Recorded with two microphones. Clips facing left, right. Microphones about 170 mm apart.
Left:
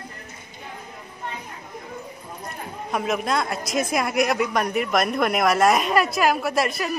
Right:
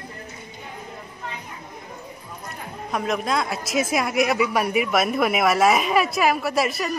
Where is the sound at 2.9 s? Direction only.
Centre (ahead or behind).